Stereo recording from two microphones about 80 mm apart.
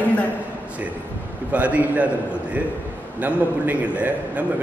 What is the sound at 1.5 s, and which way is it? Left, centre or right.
Speech, centre.